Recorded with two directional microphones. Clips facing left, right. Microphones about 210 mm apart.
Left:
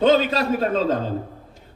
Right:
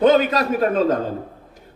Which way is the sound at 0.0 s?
30° left (ahead or behind).